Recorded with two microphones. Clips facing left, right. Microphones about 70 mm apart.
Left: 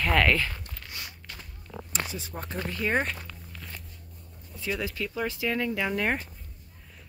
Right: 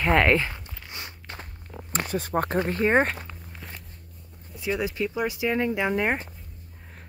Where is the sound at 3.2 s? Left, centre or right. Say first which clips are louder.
Right 3 dB; right.